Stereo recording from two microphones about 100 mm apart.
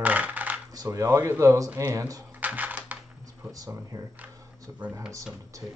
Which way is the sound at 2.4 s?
15° right (ahead or behind).